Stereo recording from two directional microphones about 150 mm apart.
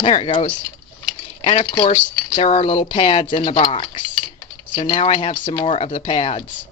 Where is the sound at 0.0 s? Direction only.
35° left (ahead or behind).